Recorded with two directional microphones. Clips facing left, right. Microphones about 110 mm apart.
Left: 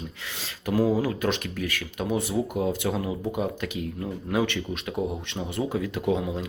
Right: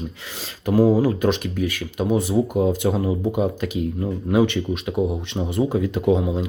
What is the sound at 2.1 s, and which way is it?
Speech, 25° right (ahead or behind).